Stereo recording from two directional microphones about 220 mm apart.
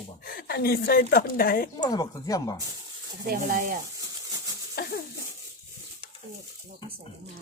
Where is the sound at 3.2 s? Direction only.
40° right (ahead or behind).